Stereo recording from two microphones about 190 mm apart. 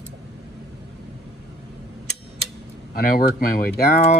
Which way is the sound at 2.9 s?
50° left (ahead or behind).